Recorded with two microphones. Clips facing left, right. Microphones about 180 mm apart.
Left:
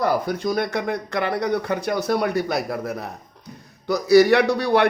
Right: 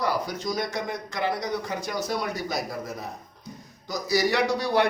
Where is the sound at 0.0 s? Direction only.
55° left (ahead or behind).